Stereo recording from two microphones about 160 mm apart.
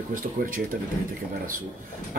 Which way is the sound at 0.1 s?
60° right (ahead or behind).